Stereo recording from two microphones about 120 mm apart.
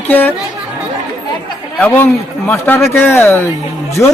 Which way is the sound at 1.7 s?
15° left (ahead or behind).